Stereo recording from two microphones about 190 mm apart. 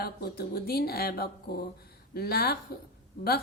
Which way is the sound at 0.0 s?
55° left (ahead or behind).